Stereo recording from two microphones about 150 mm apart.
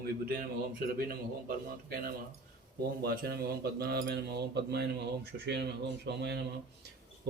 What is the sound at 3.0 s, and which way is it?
Cutlery, 90° right.